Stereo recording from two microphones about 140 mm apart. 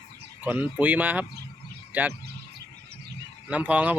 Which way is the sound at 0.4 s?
15° right (ahead or behind).